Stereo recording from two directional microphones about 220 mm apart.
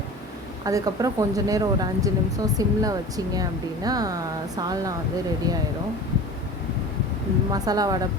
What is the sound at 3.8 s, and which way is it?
Speech, 15° right (ahead or behind).